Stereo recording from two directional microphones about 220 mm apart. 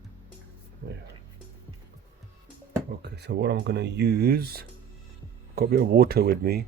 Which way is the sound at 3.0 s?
50° right (ahead or behind).